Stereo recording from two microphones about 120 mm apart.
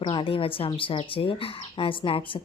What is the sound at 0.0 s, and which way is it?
A woman's voice, 45° left (ahead or behind).